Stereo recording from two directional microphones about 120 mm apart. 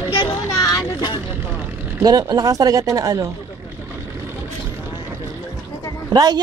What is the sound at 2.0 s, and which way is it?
Speech, 30° right (ahead or behind).